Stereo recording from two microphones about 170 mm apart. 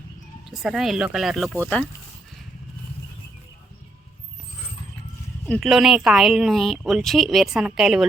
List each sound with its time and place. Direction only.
0.5 s a woman's voice: centre (ahead or behind)
5.5 s a woman's voice: centre (ahead or behind)